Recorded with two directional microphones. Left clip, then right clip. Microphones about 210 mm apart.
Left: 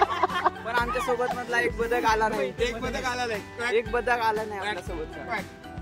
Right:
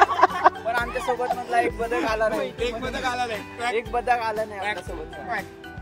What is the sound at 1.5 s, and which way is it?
Speech, 25° left (ahead or behind).